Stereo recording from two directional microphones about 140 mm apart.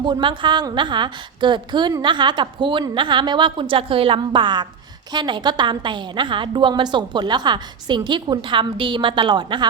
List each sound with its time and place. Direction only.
0.0 s a woman's voice: 35° right (ahead or behind)